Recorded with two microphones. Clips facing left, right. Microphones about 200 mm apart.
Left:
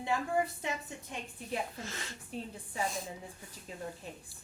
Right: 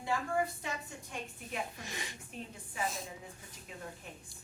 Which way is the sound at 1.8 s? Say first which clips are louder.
Left 1 dB; 15° right (ahead or behind).